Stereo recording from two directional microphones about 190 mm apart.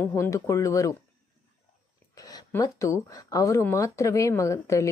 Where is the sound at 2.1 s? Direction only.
20° left (ahead or behind).